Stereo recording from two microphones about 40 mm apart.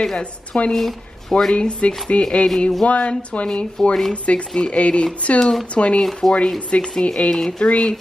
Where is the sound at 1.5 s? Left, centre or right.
Left.